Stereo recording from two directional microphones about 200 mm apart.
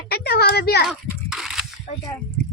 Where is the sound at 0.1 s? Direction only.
50° left (ahead or behind).